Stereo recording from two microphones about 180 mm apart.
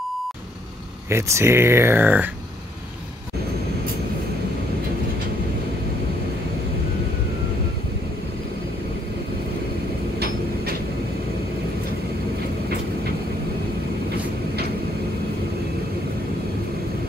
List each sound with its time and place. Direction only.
1.1 s speech: 15° right (ahead or behind)
10.1 s train: 60° right (ahead or behind)